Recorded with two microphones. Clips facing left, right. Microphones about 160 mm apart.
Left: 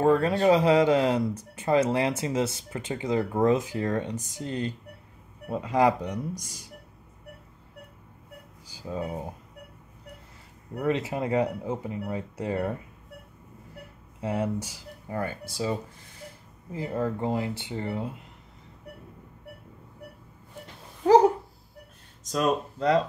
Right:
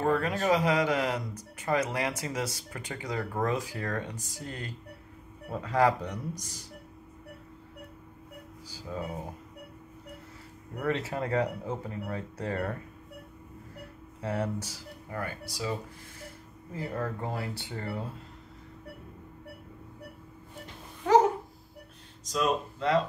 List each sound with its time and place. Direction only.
0.0 s speech: 30° left (ahead or behind); by 6.6 s 15° left (ahead or behind)
8.9 s speech: 25° left (ahead or behind)
10.8 s speech: 15° left (ahead or behind)
14.2 s speech: 15° left (ahead or behind)
15.0 s speech: 25° left (ahead or behind)
22.2 s speech: 50° left (ahead or behind)